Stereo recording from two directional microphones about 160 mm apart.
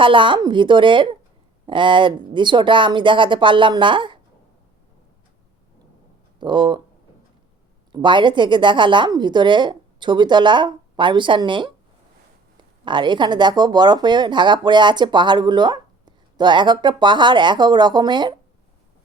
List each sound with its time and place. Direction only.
0.0 s speech: 30° right (ahead or behind)
6.4 s speech: 30° right (ahead or behind)
7.9 s speech: 30° right (ahead or behind)